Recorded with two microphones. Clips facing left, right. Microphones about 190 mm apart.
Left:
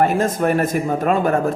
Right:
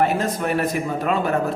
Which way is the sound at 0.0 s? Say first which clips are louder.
Left 4 dB; 50° left (ahead or behind).